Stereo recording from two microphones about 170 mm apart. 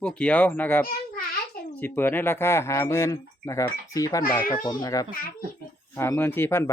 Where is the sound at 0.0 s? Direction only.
5° left (ahead or behind).